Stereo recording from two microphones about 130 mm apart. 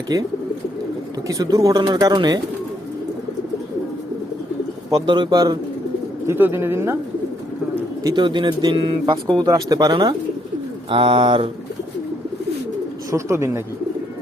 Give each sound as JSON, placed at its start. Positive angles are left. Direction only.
{"t": 0.1, "sound": "speech", "side_deg": -30}
{"t": 1.3, "sound": "speech", "side_deg": -25}
{"t": 5.0, "sound": "speech", "side_deg": -35}
{"t": 6.2, "sound": "speech", "side_deg": -15}
{"t": 8.0, "sound": "speech", "side_deg": -35}
{"t": 13.1, "sound": "speech", "side_deg": -20}